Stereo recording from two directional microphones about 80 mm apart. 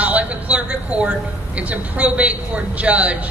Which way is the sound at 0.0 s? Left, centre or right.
Centre.